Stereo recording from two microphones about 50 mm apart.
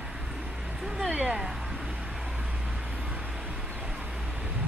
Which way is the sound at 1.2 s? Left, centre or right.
Centre.